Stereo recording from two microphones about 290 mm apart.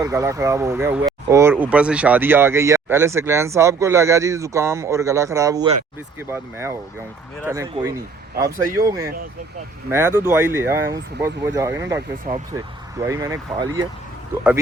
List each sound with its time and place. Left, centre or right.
0.0 s speech: centre
12.3 s speech: right
13.0 s speech: centre